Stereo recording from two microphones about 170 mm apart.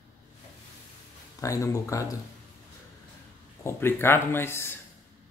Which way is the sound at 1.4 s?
20° left (ahead or behind).